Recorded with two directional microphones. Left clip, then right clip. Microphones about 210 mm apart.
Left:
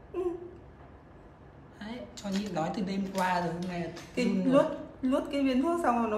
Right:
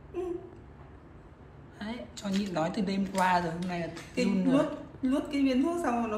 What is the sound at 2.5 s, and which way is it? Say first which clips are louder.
Speech: right 2 dB; 5° left (ahead or behind).